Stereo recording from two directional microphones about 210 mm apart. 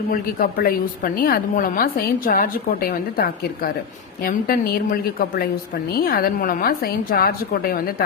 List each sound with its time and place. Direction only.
0.1 s a woman's voice: 45° left (ahead or behind)
5.9 s a woman's voice: 45° left (ahead or behind)